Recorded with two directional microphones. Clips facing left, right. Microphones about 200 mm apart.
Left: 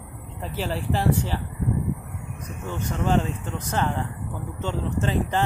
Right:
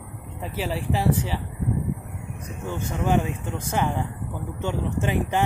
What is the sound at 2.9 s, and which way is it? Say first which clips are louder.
Speech: even; 10° right (ahead or behind).